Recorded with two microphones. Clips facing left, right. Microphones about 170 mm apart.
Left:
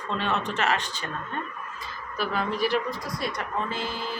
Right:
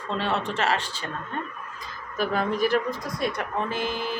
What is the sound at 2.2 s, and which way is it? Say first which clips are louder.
Speech: right 3 dB; 45° right (ahead or behind).